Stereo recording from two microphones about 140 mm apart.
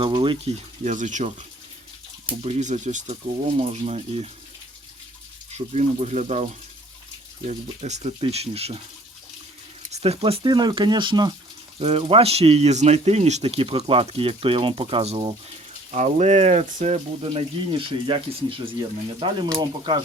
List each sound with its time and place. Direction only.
0.0 s speech: 35° right (ahead or behind)
0.9 s speech: 60° right (ahead or behind)
3.4 s speech: 45° right (ahead or behind)
5.5 s speech: 55° right (ahead or behind)
9.9 s speech: 45° right (ahead or behind)
10.5 s speech: 30° right (ahead or behind)
11.8 s speech: 45° right (ahead or behind)
15.9 s speech: 55° right (ahead or behind); by 20.0 s 35° right (ahead or behind)